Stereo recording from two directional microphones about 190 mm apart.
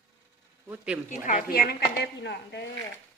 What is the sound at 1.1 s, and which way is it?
Speech, 45° left (ahead or behind).